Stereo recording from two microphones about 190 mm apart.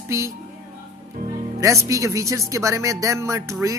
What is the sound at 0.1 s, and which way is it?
Speech, 15° right (ahead or behind).